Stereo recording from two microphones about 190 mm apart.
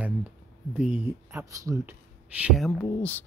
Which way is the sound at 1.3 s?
15° right (ahead or behind).